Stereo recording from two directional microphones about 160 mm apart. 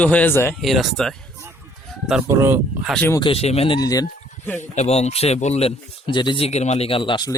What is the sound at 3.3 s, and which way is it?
Speech, 40° left (ahead or behind).